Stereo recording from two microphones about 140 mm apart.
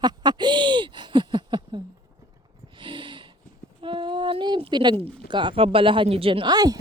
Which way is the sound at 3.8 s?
35° right (ahead or behind).